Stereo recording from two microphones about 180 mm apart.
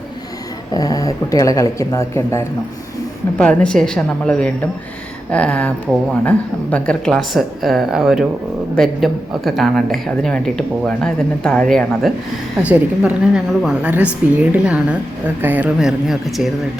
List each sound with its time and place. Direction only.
0.7 s a woman's voice: 20° left (ahead or behind); by 12.1 s 5° left (ahead or behind)
12.6 s a woman's voice: 5° right (ahead or behind)